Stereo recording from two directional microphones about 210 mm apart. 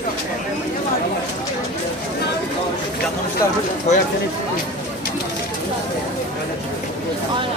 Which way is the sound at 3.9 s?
30° left (ahead or behind).